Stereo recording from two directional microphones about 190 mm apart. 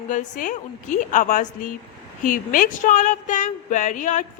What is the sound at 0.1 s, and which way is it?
A man's voice, 45° left (ahead or behind).